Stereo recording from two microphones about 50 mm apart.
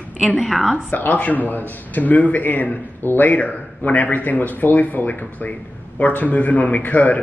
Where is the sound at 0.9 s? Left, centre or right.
Left.